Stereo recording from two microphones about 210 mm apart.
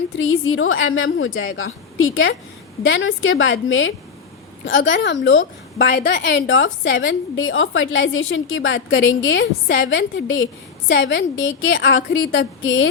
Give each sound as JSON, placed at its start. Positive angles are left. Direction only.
{"t": 0.2, "sound": "a woman's voice", "side_deg": 70}
{"t": 2.8, "sound": "a woman's voice", "side_deg": 65}